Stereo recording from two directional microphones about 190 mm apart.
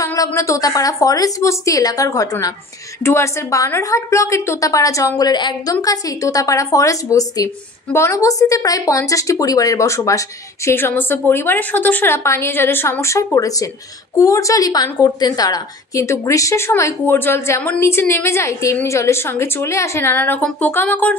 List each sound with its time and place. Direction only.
0.0 s a woman's voice: 15° left (ahead or behind)